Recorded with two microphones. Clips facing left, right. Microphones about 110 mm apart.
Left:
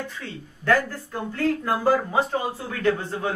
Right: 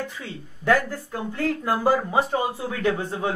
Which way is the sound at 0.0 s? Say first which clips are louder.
Right 1 dB; 15° right (ahead or behind).